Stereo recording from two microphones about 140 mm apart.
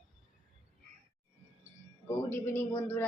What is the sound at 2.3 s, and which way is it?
Speech, 15° left (ahead or behind).